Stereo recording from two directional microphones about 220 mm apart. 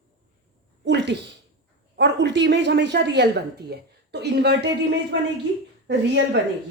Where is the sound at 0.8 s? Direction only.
50° right (ahead or behind).